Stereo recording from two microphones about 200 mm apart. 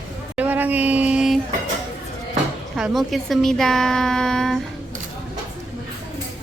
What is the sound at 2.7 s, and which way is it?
A woman's voice, centre (ahead or behind).